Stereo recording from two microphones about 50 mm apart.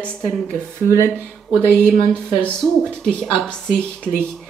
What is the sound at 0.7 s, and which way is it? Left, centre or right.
Speech, right.